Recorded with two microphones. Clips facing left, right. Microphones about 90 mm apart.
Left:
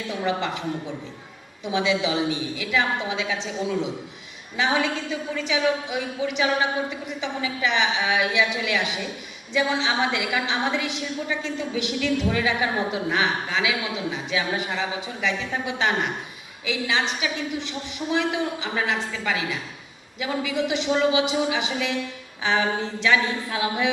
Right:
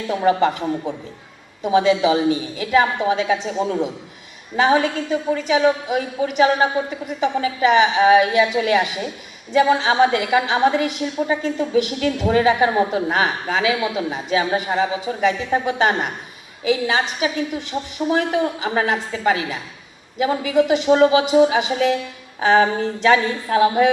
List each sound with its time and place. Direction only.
0.1 s a woman's voice: 45° right (ahead or behind)